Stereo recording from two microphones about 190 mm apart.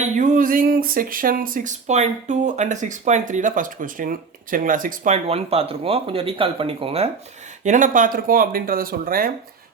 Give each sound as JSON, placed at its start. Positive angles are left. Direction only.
{"t": 0.2, "sound": "speech", "side_deg": -45}
{"t": 7.6, "sound": "speech", "side_deg": -40}